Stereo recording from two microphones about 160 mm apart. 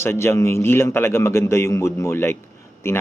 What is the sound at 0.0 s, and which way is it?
Speech, 15° left (ahead or behind).